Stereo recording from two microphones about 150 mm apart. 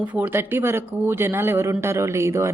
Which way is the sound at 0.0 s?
10° right (ahead or behind).